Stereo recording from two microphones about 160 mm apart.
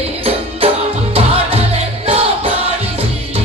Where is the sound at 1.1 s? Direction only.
40° right (ahead or behind).